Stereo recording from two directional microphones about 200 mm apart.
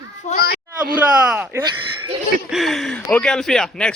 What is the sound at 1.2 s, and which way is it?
Speech, 5° right (ahead or behind).